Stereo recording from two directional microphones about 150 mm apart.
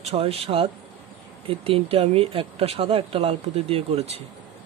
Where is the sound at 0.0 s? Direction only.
40° right (ahead or behind).